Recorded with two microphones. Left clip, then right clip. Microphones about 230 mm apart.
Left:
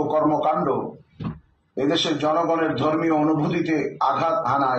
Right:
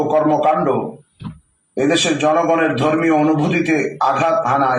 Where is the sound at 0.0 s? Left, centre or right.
Right.